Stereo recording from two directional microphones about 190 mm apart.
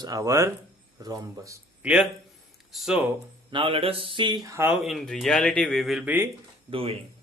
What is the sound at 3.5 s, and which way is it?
Speech, 30° right (ahead or behind).